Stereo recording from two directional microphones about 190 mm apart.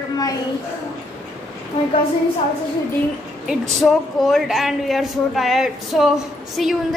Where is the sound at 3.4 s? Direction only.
Centre (ahead or behind).